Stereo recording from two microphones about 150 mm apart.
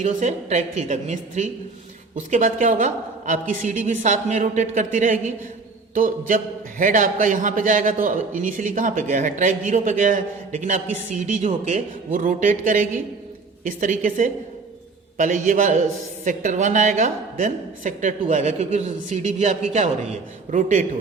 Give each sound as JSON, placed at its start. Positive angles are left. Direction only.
{"t": 0.0, "sound": "a woman's voice", "side_deg": -55}